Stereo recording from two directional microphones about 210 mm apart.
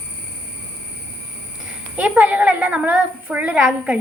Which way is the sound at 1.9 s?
5° right (ahead or behind).